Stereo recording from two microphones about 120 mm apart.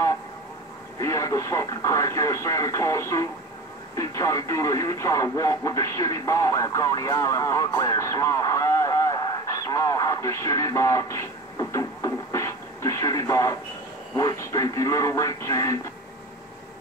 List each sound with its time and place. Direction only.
0.9 s speech: 25° left (ahead or behind)